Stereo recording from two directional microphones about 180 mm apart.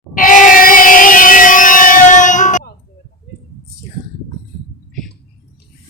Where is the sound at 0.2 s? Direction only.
45° left (ahead or behind).